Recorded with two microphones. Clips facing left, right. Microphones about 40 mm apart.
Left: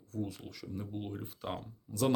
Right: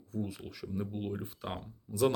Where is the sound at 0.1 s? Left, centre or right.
Centre.